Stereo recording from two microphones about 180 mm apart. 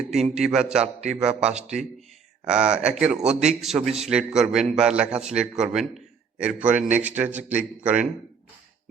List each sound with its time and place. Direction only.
0.1 s a man's voice: centre (ahead or behind)
2.5 s a man's voice: 5° right (ahead or behind)
3.2 s a man's voice: 40° right (ahead or behind)
3.8 s a man's voice: centre (ahead or behind)